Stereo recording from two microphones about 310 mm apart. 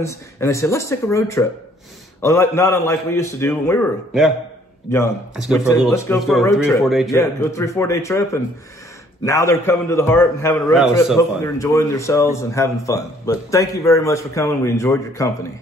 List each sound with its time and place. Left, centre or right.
0.0 s a man's voice: centre